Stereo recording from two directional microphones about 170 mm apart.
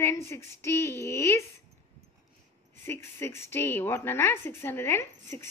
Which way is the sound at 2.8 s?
15° left (ahead or behind).